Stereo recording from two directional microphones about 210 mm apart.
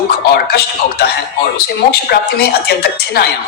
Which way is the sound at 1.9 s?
50° left (ahead or behind).